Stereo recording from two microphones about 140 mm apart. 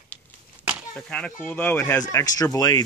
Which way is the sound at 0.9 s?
10° left (ahead or behind).